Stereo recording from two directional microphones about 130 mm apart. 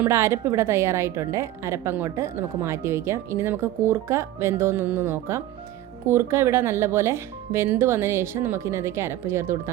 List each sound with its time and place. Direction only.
0.0 s a woman's voice: 20° right (ahead or behind)